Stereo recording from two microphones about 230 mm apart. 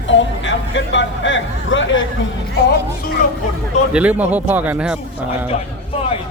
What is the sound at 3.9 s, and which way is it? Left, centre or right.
A man's voice, centre.